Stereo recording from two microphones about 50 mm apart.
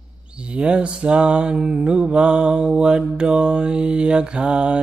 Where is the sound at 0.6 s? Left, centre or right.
Right.